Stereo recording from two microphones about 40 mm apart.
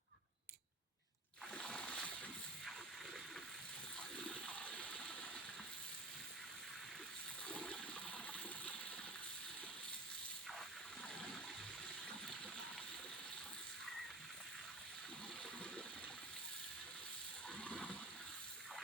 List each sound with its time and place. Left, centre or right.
1.5 s splash: left
4.2 s ratchet: left
7.4 s toilet flush: left
17.6 s water: left